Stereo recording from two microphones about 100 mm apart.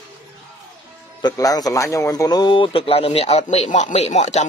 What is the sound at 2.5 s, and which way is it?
Speech, 60° left (ahead or behind).